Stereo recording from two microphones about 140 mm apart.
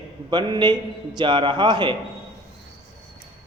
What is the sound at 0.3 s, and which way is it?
A man's voice, 30° right (ahead or behind).